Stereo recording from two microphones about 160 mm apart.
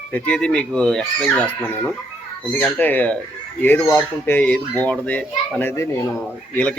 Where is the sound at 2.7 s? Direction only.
10° left (ahead or behind).